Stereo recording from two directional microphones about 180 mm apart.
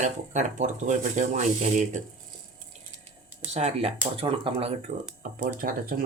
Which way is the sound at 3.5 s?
35° right (ahead or behind).